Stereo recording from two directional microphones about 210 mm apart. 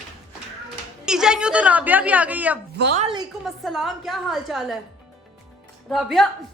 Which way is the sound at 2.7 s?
50° right (ahead or behind).